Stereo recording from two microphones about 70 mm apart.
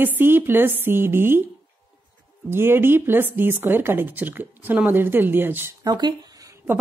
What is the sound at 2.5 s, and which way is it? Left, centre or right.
A woman's voice, right.